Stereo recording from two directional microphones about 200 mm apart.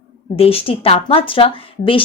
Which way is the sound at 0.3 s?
30° left (ahead or behind).